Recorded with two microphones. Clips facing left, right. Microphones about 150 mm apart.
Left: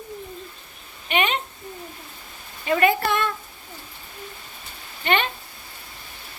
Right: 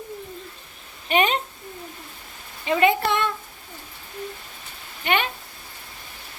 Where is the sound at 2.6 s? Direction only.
20° right (ahead or behind).